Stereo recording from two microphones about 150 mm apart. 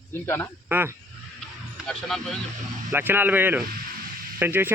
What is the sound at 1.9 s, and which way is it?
Speech, centre (ahead or behind).